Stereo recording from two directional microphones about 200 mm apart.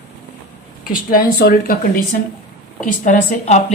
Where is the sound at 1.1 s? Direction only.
50° left (ahead or behind).